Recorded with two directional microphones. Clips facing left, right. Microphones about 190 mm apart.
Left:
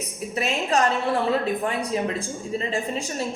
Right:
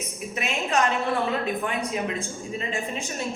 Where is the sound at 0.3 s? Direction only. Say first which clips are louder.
Left 2 dB; 35° left (ahead or behind).